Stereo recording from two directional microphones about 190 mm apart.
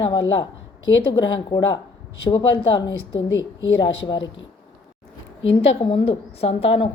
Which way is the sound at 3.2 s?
80° left.